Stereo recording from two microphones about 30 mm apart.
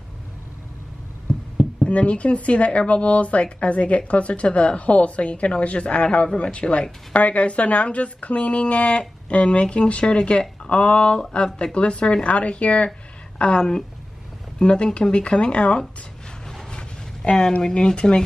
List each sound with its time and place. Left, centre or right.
1.3 s music: left
1.9 s a woman's voice: left
6.2 s speech: left
7.2 s a woman's voice: left
16.7 s a sound: left
17.7 s speech: left